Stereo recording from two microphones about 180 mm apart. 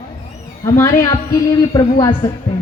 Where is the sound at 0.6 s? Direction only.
15° left (ahead or behind).